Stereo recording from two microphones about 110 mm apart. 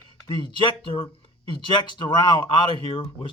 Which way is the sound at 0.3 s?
45° left (ahead or behind).